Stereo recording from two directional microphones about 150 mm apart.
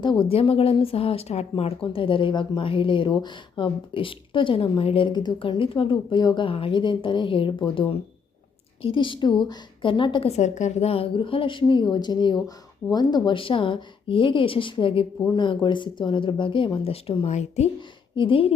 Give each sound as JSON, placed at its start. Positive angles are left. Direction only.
{"t": 0.0, "sound": "a woman's voice", "side_deg": 30}
{"t": 17.7, "sound": "a woman's voice", "side_deg": 35}